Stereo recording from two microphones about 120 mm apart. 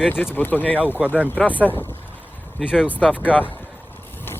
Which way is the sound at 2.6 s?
5° right (ahead or behind).